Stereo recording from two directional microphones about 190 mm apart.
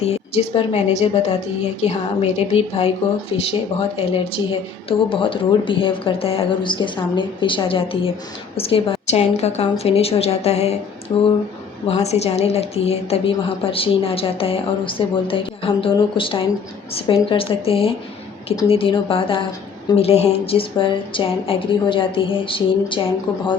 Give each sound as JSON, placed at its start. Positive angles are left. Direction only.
{"t": 0.0, "sound": "a woman's voice", "side_deg": 30}
{"t": 11.9, "sound": "a woman's voice", "side_deg": 35}